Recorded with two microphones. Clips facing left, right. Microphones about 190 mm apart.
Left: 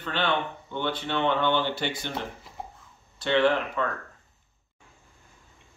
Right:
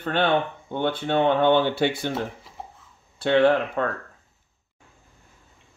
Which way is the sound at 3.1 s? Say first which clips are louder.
Right 4 dB; 55° right (ahead or behind).